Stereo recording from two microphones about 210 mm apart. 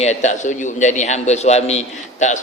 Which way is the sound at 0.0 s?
35° left (ahead or behind).